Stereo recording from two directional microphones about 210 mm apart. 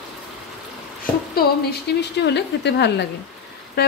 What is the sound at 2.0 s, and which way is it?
Speech, 55° left (ahead or behind).